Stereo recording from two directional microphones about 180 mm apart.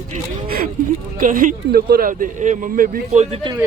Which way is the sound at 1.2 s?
45° right (ahead or behind).